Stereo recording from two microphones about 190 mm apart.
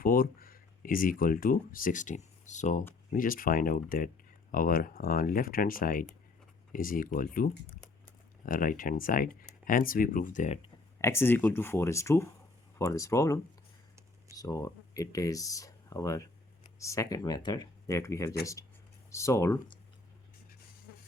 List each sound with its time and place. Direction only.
0.0 s speech: 50° left (ahead or behind)
11.0 s speech: 15° left (ahead or behind)